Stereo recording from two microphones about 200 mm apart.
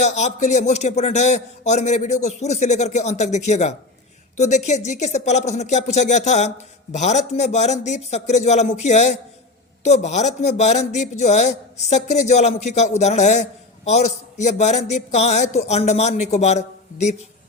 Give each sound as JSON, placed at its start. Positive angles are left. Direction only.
{"t": 0.0, "sound": "a man's voice", "side_deg": 35}